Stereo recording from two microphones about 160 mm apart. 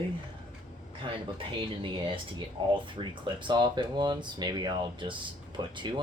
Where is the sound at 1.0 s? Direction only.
30° right (ahead or behind).